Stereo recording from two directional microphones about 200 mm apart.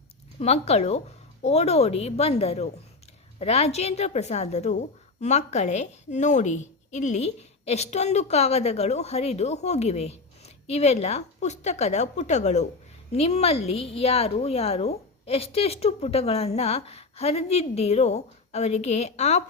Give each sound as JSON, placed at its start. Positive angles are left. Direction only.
{"t": 0.3, "sound": "a woman's voice", "side_deg": 30}